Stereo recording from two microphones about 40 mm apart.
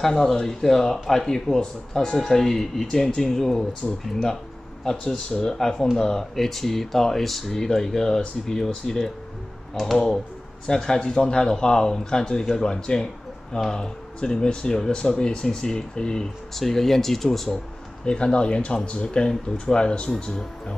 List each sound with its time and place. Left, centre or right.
0.0 s speech: centre
5.3 s speech: centre
16.5 s speech: centre
18.0 s speech: left